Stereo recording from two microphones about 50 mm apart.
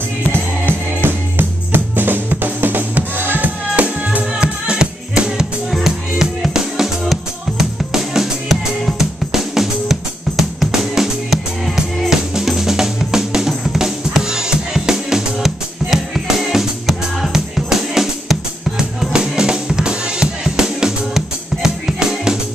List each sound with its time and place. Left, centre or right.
0.3 s music: right
4.4 s music: centre
5.7 s music: centre